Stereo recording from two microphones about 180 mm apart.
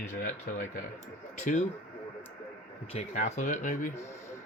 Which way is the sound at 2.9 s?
40° left (ahead or behind).